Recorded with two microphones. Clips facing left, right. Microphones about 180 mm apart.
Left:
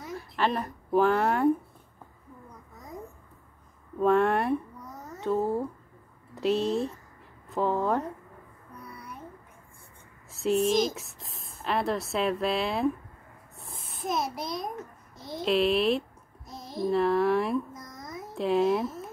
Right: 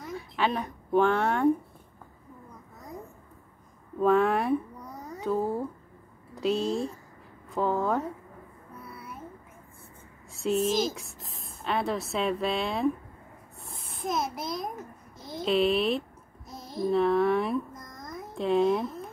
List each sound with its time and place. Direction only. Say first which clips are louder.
0.0 s speech: even; centre (ahead or behind)
4.0 s a woman's voice: even; centre (ahead or behind)
4.9 s cat: right 3 dB; 15° right (ahead or behind)
5.2 s a woman's voice: left 1 dB; centre (ahead or behind)
8.8 s babbling: even; 5° right (ahead or behind)
10.3 s a woman's voice: left 2 dB; centre (ahead or behind)
13.6 s a sound: even; centre (ahead or behind)
15.1 s a woman's voice: even; centre (ahead or behind)